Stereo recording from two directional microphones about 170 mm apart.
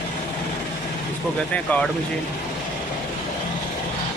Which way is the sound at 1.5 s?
5° left (ahead or behind).